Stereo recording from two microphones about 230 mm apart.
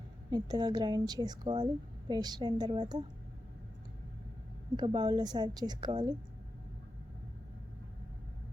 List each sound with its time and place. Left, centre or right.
0.3 s a woman's voice: centre
4.8 s a woman's voice: centre